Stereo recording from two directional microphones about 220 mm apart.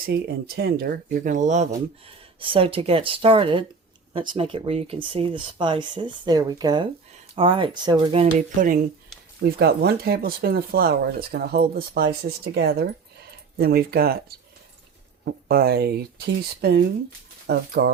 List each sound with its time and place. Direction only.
0.0 s speech: 45° right (ahead or behind)
9.4 s speech: 45° right (ahead or behind)